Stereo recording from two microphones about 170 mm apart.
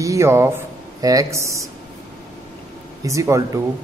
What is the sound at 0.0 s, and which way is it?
Speech, 15° right (ahead or behind).